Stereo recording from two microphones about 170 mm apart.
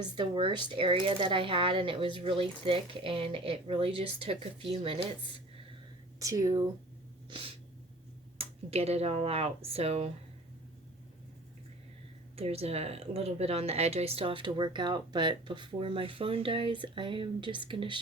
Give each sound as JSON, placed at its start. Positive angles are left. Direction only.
{"t": 0.0, "sound": "speech", "side_deg": -30}
{"t": 6.1, "sound": "speech", "side_deg": -20}
{"t": 7.3, "sound": "sneeze", "side_deg": -30}
{"t": 8.4, "sound": "speech", "side_deg": -40}
{"t": 12.4, "sound": "speech", "side_deg": -35}